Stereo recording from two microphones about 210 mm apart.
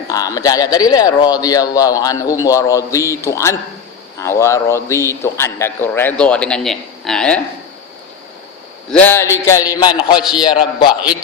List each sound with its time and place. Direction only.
0.1 s speech: 15° left (ahead or behind)
8.9 s a man's voice: 10° left (ahead or behind)